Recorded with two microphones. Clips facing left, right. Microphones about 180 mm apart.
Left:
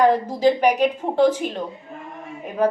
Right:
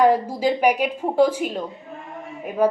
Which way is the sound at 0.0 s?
10° right (ahead or behind).